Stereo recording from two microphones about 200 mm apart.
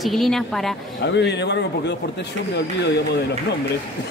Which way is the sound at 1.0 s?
60° left (ahead or behind).